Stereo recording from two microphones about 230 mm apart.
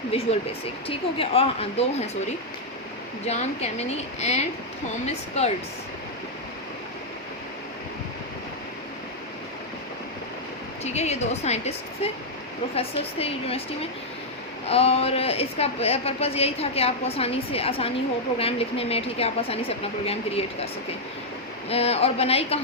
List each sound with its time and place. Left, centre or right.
0.1 s a woman's voice: left
3.2 s a woman's voice: left
10.8 s a woman's voice: left
14.7 s a woman's voice: left
21.7 s a woman's voice: left